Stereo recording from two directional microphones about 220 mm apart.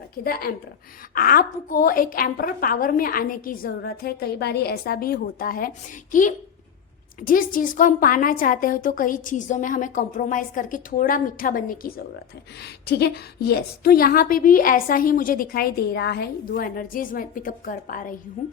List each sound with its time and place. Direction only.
0.3 s a woman's voice: 45° left (ahead or behind)